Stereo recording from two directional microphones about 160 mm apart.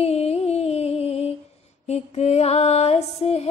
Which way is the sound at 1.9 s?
45° left (ahead or behind).